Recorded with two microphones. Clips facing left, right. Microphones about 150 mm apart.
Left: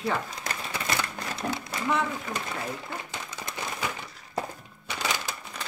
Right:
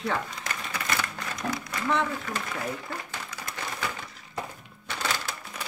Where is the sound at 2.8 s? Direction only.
20° left (ahead or behind).